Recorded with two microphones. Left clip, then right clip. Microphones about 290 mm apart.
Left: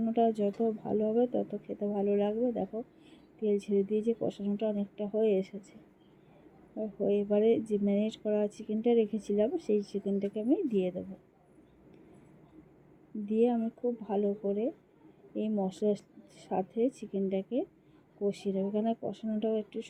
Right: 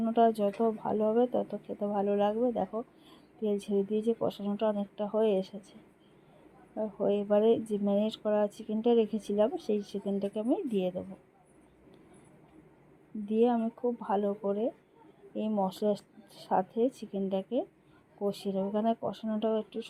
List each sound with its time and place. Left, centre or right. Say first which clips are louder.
0.0 s speech: right 3 dB; right
6.7 s speech: right 1 dB; right
13.2 s speech: right 1 dB; right